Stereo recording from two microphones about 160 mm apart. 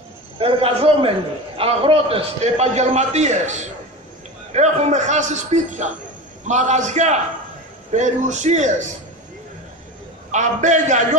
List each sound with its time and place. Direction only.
0.4 s a man's voice: 35° right (ahead or behind)
10.3 s a man's voice: 50° right (ahead or behind)